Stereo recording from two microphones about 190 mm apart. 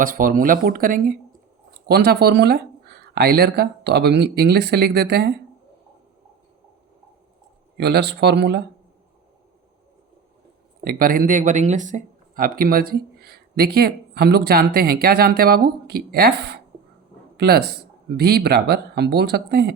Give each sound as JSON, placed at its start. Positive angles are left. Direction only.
{"t": 0.0, "sound": "speech", "side_deg": -45}
{"t": 1.9, "sound": "speech", "side_deg": -60}
{"t": 7.8, "sound": "speech", "side_deg": -60}
{"t": 10.8, "sound": "speech", "side_deg": -50}